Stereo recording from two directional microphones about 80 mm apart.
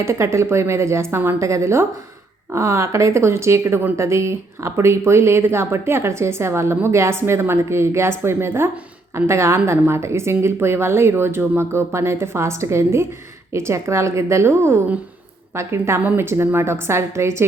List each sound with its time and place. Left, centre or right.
0.0 s speech: right